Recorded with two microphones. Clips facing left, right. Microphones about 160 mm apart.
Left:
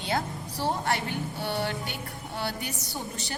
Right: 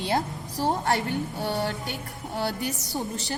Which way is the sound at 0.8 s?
45° right (ahead or behind).